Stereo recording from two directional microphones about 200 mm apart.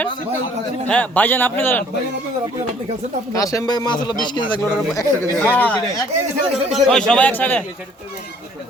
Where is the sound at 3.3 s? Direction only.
15° left (ahead or behind).